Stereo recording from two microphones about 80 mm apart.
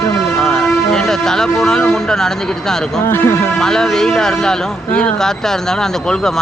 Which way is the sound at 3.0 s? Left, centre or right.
Left.